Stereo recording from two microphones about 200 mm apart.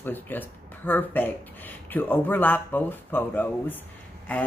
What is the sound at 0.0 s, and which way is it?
Speech, 10° left (ahead or behind).